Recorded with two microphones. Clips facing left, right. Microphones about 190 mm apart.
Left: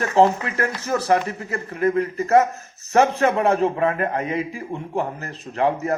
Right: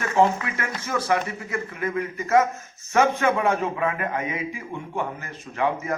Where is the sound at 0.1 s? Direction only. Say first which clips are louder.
Left 3 dB; 35° left (ahead or behind).